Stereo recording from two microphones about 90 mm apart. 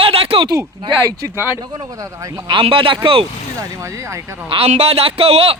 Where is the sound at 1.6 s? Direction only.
45° right (ahead or behind).